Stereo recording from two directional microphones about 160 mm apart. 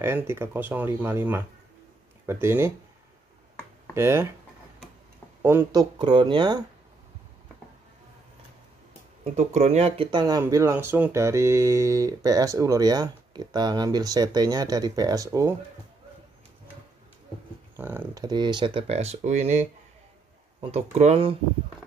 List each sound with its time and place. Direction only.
0.0 s speech: 15° right (ahead or behind)
3.9 s speech: 15° right (ahead or behind)
5.4 s speech: 15° right (ahead or behind)
9.2 s speech: 45° right (ahead or behind); by 15.5 s 20° right (ahead or behind)
17.7 s speech: 15° right (ahead or behind)
18.2 s speech: 25° right (ahead or behind)